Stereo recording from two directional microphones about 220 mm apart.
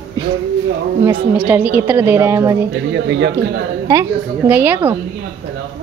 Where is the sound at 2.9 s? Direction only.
50° right (ahead or behind).